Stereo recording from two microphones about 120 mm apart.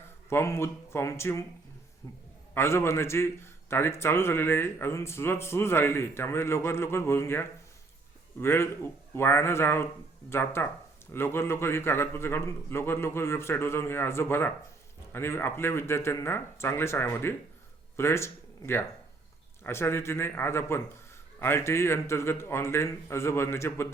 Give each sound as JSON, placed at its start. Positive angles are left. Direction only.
{"t": 0.3, "sound": "a man's voice", "side_deg": 20}
{"t": 2.6, "sound": "a man's voice", "side_deg": 20}